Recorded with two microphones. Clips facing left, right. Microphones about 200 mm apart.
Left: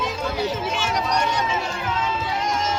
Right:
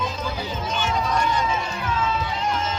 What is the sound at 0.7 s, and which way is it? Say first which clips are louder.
Music: right 4 dB; 80° left.